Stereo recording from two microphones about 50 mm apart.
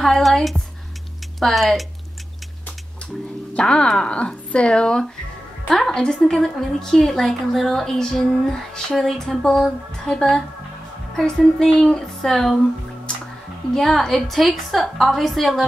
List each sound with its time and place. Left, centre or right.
0.0 s a woman's voice: centre
3.5 s speech: left
3.8 s a woman's voice: centre
4.1 s a woman's voice: left
13.7 s a woman's voice: centre